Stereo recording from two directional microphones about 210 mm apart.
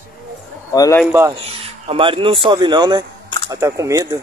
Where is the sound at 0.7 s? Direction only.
15° left (ahead or behind).